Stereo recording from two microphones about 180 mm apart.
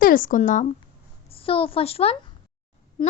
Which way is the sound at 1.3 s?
30° left (ahead or behind).